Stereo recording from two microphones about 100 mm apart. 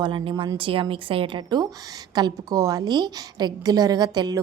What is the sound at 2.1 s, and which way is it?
A woman's voice, 40° right (ahead or behind).